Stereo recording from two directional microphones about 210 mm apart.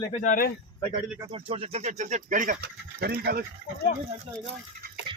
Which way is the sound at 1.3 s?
25° right (ahead or behind).